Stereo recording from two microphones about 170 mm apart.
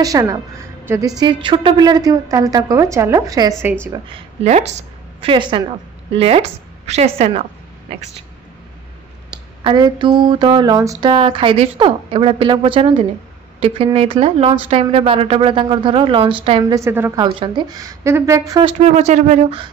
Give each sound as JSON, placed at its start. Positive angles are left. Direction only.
{"t": 0.0, "sound": "a woman's voice", "side_deg": -20}
{"t": 4.1, "sound": "a woman's voice", "side_deg": -40}
{"t": 9.6, "sound": "a woman's voice", "side_deg": -25}
{"t": 11.1, "sound": "a woman's voice", "side_deg": -30}
{"t": 16.7, "sound": "a woman's voice", "side_deg": -15}
{"t": 17.2, "sound": "a woman's voice", "side_deg": -25}
{"t": 18.6, "sound": "a woman's voice", "side_deg": -40}